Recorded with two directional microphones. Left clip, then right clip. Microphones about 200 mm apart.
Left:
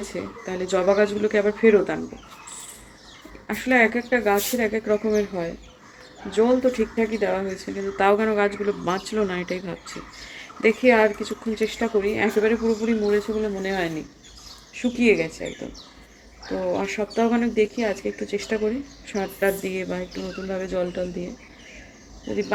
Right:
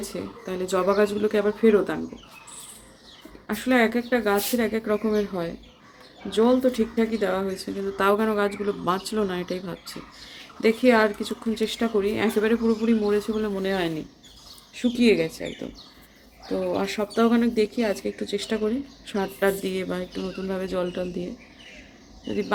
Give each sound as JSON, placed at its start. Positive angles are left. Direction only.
{"t": 0.1, "sound": "speech", "side_deg": -10}
{"t": 3.4, "sound": "speech", "side_deg": -15}
{"t": 16.8, "sound": "speech", "side_deg": -25}